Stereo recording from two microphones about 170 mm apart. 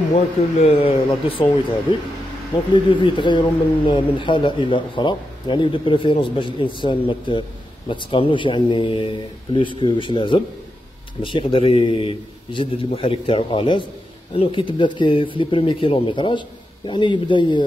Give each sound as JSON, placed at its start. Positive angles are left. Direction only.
{"t": 0.1, "sound": "a man's voice", "side_deg": 40}